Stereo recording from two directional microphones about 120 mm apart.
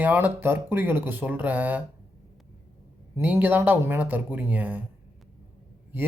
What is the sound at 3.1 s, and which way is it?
Speech, 15° right (ahead or behind).